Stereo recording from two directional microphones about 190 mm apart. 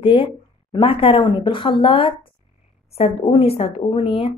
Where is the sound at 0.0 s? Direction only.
25° left (ahead or behind).